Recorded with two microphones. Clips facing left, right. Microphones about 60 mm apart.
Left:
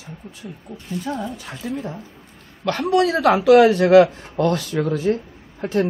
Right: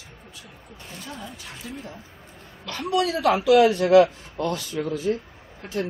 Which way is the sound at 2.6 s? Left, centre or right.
Left.